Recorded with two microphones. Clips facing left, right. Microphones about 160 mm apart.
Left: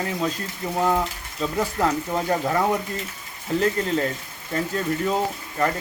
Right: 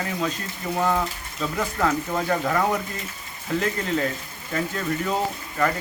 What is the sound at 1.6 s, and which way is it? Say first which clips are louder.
Speech: left 1 dB; 20° left (ahead or behind).